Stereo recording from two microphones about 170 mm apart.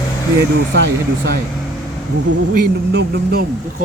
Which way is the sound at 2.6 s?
75° right (ahead or behind).